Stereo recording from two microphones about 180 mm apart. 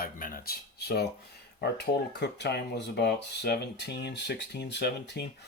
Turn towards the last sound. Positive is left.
turn(degrees=65)  # may be behind; listen again after turning